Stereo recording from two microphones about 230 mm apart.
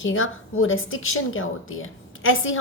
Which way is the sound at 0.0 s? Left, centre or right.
Left.